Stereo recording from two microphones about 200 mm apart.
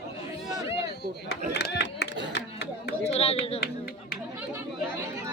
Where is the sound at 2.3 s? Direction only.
60° left (ahead or behind).